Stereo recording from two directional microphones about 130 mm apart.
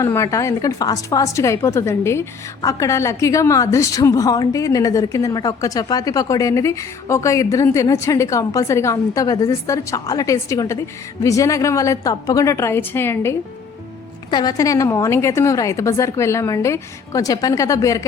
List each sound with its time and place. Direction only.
0.0 s a woman's voice: 25° left (ahead or behind)
14.3 s a woman's voice: 30° left (ahead or behind)